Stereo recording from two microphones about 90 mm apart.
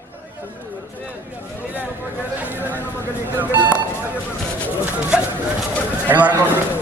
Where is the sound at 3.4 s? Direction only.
20° right (ahead or behind).